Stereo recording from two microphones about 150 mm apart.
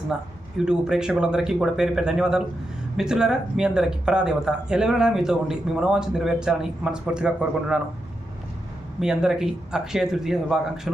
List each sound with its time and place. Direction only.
0.6 s speech: 5° right (ahead or behind)
9.0 s speech: 5° right (ahead or behind)